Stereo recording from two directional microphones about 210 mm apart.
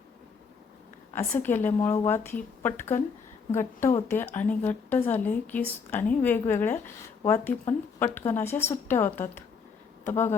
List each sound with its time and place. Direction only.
1.1 s a woman's voice: 10° left (ahead or behind)